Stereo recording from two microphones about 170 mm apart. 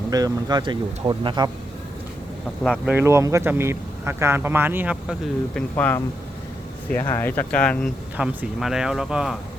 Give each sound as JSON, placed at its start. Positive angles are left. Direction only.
{"t": 0.1, "sound": "speech", "side_deg": -20}
{"t": 2.8, "sound": "speech", "side_deg": -15}
{"t": 5.5, "sound": "speech", "side_deg": 10}
{"t": 8.1, "sound": "speech", "side_deg": -5}